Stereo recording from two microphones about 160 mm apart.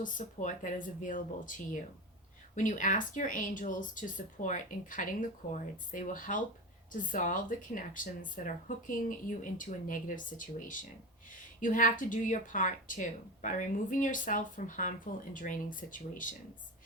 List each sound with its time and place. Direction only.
0.0 s a woman's voice: 55° left (ahead or behind)